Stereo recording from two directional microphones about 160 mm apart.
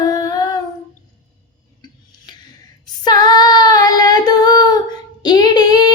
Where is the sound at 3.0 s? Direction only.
25° left (ahead or behind).